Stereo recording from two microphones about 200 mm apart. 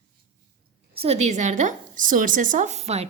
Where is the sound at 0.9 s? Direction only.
30° right (ahead or behind).